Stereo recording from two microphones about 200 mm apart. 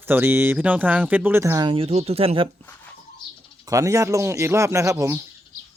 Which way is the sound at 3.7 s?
15° right (ahead or behind).